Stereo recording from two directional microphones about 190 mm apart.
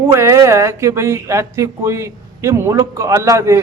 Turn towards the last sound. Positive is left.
turn(degrees=-15)  # may be behind; listen again after turning